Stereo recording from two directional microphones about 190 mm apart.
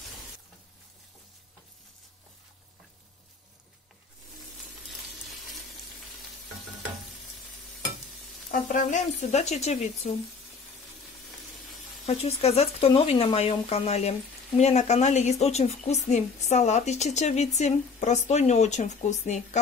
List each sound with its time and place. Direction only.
8.5 s speech: 40° left (ahead or behind)
12.1 s speech: 30° left (ahead or behind)